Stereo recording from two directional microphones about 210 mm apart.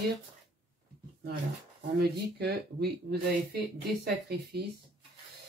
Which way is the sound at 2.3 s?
50° right (ahead or behind).